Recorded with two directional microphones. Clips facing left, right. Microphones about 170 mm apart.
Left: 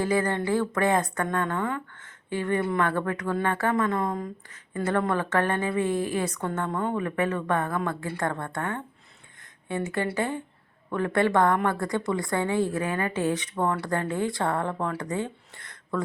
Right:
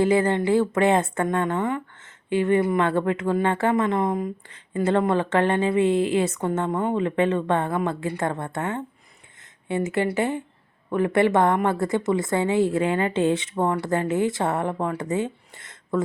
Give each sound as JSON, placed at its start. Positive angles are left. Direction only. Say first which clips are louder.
{"t": 0.0, "sound": "a woman's voice", "louder": "right 5 dB", "side_deg": -25}
{"t": 10.2, "sound": "a woman's voice", "louder": "right 4 dB", "side_deg": -20}